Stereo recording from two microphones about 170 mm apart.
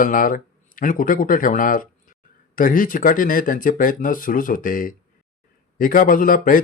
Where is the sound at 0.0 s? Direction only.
55° left (ahead or behind).